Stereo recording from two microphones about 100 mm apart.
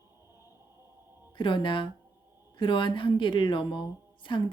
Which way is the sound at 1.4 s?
55° left (ahead or behind).